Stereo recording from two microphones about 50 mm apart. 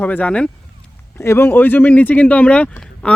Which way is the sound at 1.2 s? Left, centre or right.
Left.